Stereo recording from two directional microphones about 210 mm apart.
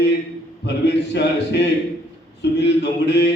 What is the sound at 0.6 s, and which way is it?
A man's voice, 55° left (ahead or behind).